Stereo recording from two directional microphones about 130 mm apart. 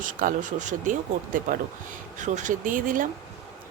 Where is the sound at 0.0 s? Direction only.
90° right.